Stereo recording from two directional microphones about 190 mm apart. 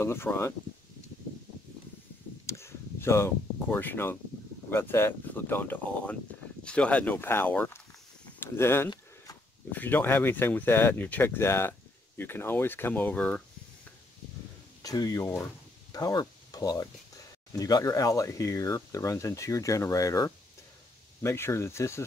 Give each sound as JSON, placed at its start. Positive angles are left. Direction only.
{"t": 0.0, "sound": "speech", "side_deg": 10}
{"t": 2.4, "sound": "a sound", "side_deg": 15}
{"t": 4.6, "sound": "speech", "side_deg": 10}
{"t": 14.8, "sound": "speech", "side_deg": 20}